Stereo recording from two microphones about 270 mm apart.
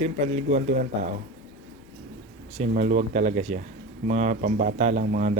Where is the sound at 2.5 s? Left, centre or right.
Right.